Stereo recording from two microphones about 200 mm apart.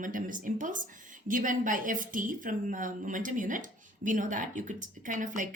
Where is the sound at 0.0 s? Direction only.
40° right (ahead or behind).